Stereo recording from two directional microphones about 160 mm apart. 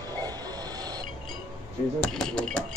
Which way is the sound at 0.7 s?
25° right (ahead or behind).